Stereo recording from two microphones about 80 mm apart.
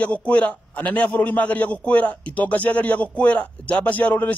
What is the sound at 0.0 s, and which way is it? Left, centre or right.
A man's voice, centre.